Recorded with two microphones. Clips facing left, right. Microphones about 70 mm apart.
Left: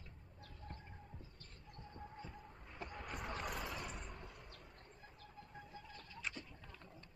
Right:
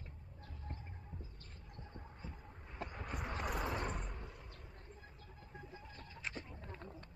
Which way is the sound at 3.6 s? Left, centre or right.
Right.